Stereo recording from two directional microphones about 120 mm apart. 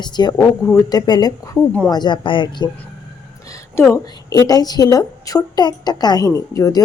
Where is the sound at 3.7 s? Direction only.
20° left (ahead or behind).